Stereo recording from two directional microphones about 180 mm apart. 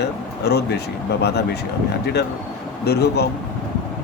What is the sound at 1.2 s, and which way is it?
Speech, 65° left (ahead or behind).